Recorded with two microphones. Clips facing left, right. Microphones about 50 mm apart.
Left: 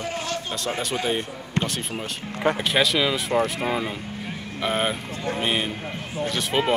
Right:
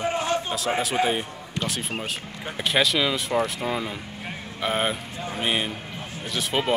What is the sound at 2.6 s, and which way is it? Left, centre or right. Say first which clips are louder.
Speech: right 4 dB; centre.